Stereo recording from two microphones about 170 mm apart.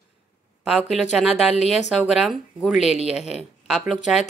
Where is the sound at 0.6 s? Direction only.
5° right (ahead or behind).